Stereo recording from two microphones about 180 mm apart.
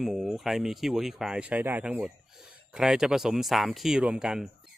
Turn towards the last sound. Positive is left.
turn(degrees=-5)  # may be behind; listen again after turning